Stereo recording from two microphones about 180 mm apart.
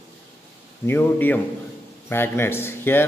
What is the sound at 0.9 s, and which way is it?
A man's voice, 10° left (ahead or behind).